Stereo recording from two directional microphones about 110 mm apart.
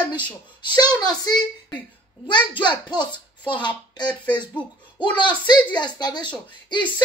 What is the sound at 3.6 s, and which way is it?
A woman's voice, 45° left (ahead or behind).